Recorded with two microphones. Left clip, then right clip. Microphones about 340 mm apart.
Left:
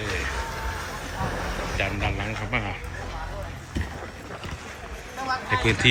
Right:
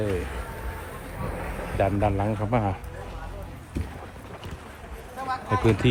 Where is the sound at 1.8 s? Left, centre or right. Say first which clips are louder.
Right 6 dB; centre.